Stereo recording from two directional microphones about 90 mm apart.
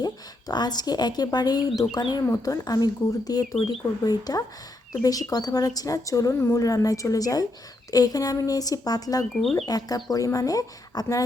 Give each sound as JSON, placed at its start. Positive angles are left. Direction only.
{"t": 0.0, "sound": "a woman's voice", "side_deg": 50}
{"t": 9.4, "sound": "speech", "side_deg": 5}
{"t": 9.6, "sound": "a woman's voice", "side_deg": 45}